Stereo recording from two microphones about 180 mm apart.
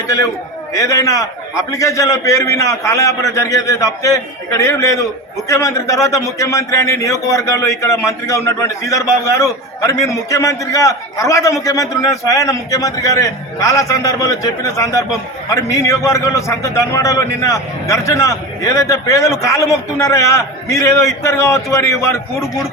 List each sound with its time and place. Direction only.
0.7 s a man's voice: 20° left (ahead or behind)